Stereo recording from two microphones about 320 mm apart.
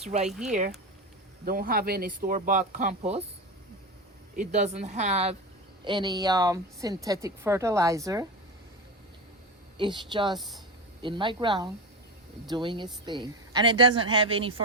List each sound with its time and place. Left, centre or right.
0.0 s speech: centre
0.3 s speech: centre
1.5 s speech: right
4.4 s a woman's voice: right
9.7 s a woman's voice: centre